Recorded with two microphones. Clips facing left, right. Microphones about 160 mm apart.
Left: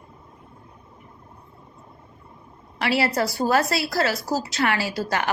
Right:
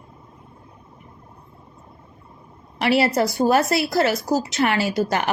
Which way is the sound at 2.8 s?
20° right (ahead or behind).